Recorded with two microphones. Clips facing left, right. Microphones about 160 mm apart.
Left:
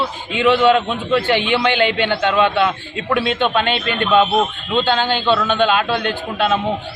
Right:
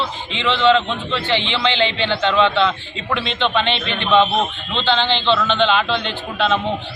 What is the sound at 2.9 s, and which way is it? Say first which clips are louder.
Speech: left 5 dB; 60° left (ahead or behind).